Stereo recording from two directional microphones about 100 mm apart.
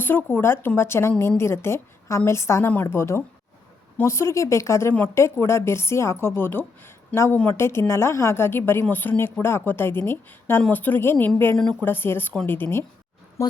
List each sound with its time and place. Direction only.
0.0 s a woman's voice: 20° left (ahead or behind)
11.5 s speech: 5° left (ahead or behind)
11.8 s a woman's voice: 20° left (ahead or behind)